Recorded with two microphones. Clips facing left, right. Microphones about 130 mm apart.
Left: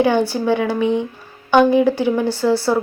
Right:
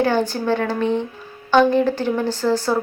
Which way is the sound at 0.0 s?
15° left (ahead or behind).